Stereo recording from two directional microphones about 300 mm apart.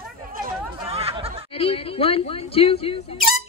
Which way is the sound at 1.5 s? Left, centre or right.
Centre.